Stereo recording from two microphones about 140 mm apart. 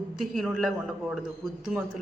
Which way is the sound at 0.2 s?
Centre (ahead or behind).